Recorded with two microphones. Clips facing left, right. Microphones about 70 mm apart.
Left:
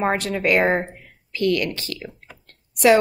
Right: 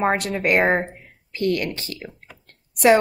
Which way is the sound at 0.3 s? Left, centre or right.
Right.